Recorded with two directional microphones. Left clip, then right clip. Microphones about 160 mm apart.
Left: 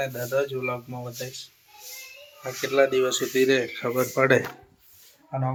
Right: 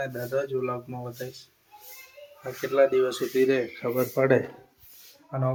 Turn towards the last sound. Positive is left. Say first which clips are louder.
# left 1 dB
turn(degrees=-10)  # may be behind; listen again after turning